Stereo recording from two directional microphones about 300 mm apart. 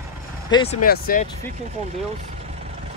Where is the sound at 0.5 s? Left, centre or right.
Left.